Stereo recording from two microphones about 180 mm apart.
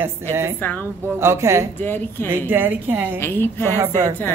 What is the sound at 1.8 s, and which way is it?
Speech, 10° left (ahead or behind).